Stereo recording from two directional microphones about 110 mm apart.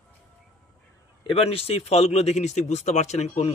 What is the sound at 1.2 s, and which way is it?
Speech, 60° left (ahead or behind).